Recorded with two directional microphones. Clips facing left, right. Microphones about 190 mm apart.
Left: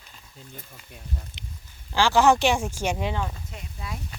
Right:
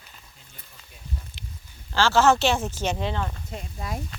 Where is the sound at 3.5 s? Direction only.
45° right (ahead or behind).